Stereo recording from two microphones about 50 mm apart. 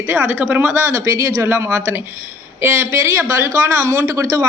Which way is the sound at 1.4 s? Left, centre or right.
Right.